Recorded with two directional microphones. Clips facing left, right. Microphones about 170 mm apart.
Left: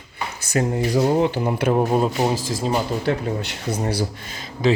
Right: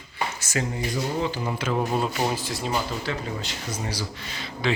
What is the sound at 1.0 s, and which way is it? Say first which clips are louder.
Speech: left 9 dB; 60° left (ahead or behind).